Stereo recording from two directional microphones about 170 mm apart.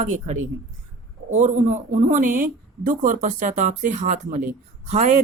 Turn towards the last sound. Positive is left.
turn(degrees=-40)  # may be behind; listen again after turning